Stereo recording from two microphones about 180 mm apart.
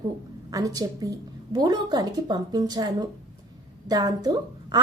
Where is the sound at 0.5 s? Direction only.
20° right (ahead or behind).